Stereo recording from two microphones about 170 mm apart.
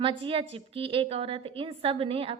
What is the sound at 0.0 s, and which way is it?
A woman's voice, 30° right (ahead or behind).